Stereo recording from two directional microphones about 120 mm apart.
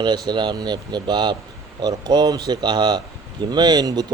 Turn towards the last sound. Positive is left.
turn(degrees=-35)  # may be behind; listen again after turning